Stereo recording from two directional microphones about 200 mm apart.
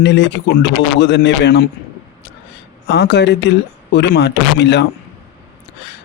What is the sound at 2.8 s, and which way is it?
Speech, 60° left (ahead or behind).